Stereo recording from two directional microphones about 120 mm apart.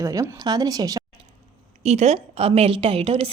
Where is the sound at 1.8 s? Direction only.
65° right (ahead or behind).